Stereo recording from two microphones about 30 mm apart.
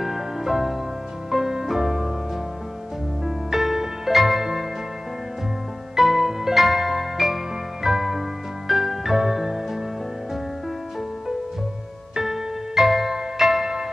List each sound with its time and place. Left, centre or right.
0.0 s music: centre
3.3 s music: centre
5.9 s music: centre
12.2 s music: centre